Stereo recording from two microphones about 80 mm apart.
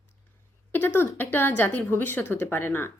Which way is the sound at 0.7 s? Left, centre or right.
Left.